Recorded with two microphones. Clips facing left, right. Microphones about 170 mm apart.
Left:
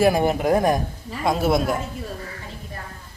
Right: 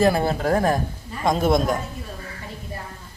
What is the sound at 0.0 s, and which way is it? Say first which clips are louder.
Speech: left 1 dB; 15° left (ahead or behind).